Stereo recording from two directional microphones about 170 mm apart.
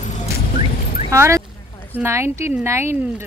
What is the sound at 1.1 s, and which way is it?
Speech, 15° right (ahead or behind).